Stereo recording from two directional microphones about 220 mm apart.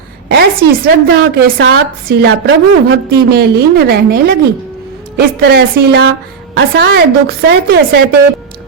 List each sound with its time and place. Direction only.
0.3 s a woman's voice: 45° right (ahead or behind)